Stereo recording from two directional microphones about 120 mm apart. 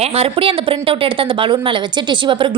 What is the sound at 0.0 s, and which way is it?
A woman's voice, 55° right (ahead or behind).